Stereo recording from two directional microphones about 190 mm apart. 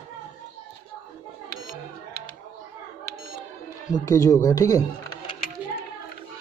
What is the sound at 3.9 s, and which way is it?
Speech, 15° left (ahead or behind).